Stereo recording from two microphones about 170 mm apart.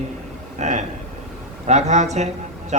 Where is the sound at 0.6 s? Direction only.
45° right (ahead or behind).